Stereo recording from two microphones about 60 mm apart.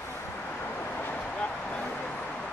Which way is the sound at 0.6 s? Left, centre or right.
Left.